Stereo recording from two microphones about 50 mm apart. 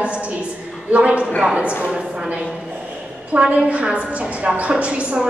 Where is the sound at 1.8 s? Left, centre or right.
Centre.